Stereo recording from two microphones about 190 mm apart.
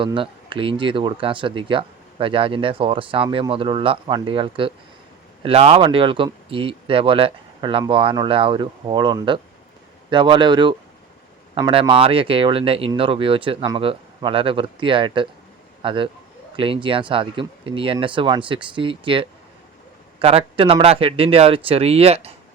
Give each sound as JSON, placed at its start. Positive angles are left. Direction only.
{"t": 0.0, "sound": "speech", "side_deg": -25}